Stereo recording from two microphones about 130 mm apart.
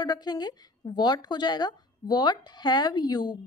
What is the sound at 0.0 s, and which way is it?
A woman's voice, 30° left (ahead or behind).